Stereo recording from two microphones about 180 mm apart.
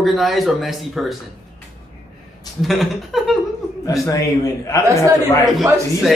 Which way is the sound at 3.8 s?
15° left (ahead or behind).